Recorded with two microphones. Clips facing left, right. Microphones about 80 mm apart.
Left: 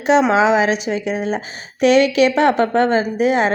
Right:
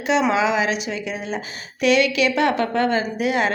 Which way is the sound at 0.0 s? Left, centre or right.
Left.